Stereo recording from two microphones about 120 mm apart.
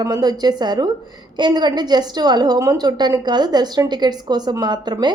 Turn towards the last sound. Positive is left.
turn(degrees=-35)  # may be behind; listen again after turning